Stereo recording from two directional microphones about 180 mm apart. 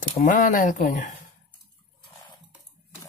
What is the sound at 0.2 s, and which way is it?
Speech, 45° left (ahead or behind).